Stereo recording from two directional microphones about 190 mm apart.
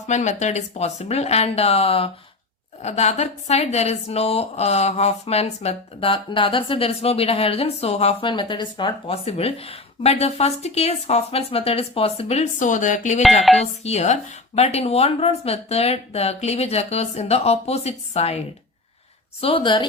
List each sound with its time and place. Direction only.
0.1 s a woman's voice: 40° left (ahead or behind)
13.4 s speech: centre (ahead or behind)
13.8 s a woman's voice: 35° left (ahead or behind)
19.4 s a woman's voice: 30° left (ahead or behind)